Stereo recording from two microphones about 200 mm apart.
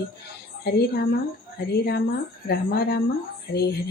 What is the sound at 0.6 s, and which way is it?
Speech, 55° left (ahead or behind).